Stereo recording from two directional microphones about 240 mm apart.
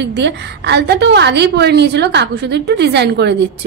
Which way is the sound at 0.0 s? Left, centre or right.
Right.